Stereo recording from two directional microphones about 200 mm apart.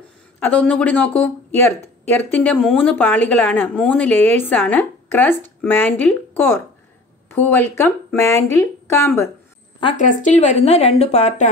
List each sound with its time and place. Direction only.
0.4 s speech: 5° left (ahead or behind)
9.9 s speech: 40° left (ahead or behind)